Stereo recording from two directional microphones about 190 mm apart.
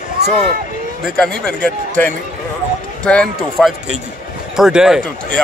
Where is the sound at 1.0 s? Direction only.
5° left (ahead or behind).